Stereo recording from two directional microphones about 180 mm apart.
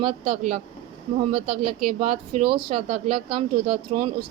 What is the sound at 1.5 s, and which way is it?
Speech, centre (ahead or behind).